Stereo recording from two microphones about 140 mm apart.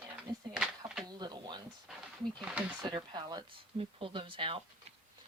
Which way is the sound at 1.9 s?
5° right (ahead or behind).